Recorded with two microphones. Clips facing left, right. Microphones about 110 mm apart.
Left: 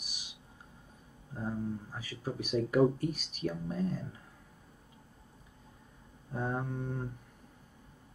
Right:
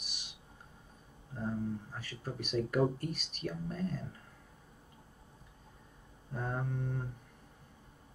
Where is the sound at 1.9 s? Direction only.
15° left (ahead or behind).